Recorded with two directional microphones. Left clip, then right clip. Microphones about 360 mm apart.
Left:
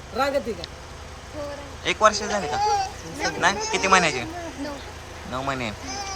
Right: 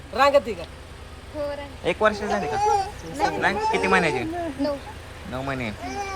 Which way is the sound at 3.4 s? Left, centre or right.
Centre.